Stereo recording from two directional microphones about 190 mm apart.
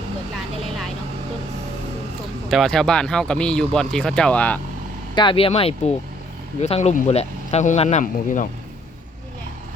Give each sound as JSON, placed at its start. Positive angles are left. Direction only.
{"t": 2.5, "sound": "speech", "side_deg": 0}
{"t": 5.1, "sound": "speech", "side_deg": 25}